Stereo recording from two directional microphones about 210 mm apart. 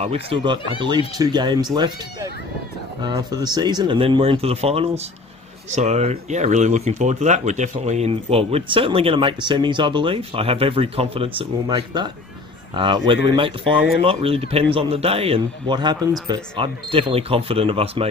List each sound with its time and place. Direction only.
0.0 s speech: 25° right (ahead or behind)